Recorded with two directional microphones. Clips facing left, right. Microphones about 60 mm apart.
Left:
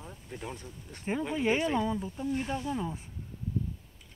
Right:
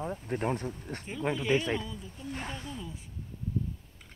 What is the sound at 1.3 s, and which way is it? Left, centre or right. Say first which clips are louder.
Speech: left 1 dB; left.